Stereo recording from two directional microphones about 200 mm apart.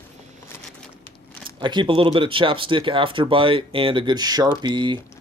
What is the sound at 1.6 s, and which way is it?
Speech, 25° right (ahead or behind).